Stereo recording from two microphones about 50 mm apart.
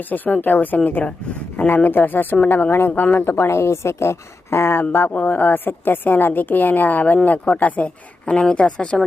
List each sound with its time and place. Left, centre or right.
0.1 s a woman's voice: left
2.9 s a woman's voice: left
3.2 s a woman's voice: left
4.9 s a woman's voice: left
8.2 s a woman's voice: centre